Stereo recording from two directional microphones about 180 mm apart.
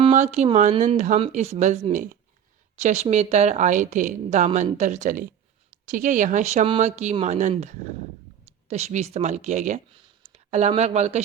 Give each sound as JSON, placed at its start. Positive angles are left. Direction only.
{"t": 0.1, "sound": "speech", "side_deg": -40}
{"t": 10.3, "sound": "a sound", "side_deg": -40}
{"t": 10.7, "sound": "speech", "side_deg": -40}